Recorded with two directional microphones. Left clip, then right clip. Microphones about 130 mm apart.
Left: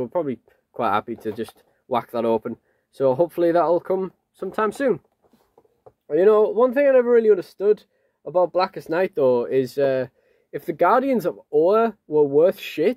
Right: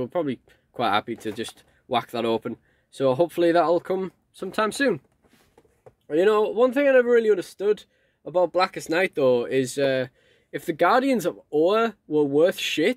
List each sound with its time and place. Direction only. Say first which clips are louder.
0.0 s speech: left 2 dB; 35° right (ahead or behind)
6.0 s speech: left 4 dB; 20° right (ahead or behind)
9.0 s speech: left 2 dB; 25° right (ahead or behind)